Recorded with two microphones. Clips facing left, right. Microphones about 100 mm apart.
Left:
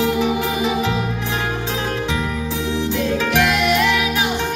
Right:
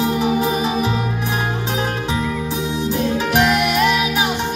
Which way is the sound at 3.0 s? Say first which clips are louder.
Right 2 dB; 15° right (ahead or behind).